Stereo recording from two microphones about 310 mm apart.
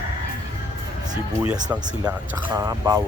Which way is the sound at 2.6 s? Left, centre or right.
Centre.